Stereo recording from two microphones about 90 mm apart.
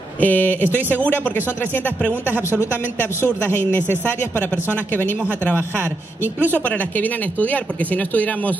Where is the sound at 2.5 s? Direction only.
10° left (ahead or behind).